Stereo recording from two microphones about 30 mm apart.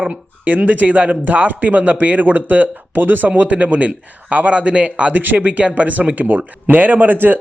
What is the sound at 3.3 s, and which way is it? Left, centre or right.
A man's voice, right.